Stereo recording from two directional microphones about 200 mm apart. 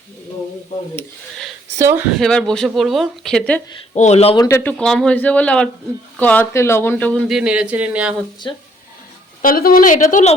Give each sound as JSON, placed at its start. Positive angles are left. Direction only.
{"t": 1.8, "sound": "speech", "side_deg": -10}
{"t": 2.1, "sound": "speech", "side_deg": 0}
{"t": 3.9, "sound": "speech", "side_deg": 35}
{"t": 4.4, "sound": "speech", "side_deg": 10}
{"t": 8.4, "sound": "speech", "side_deg": 20}
{"t": 9.4, "sound": "a woman's voice", "side_deg": 45}